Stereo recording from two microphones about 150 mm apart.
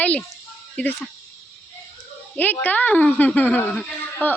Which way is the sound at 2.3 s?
10° left (ahead or behind).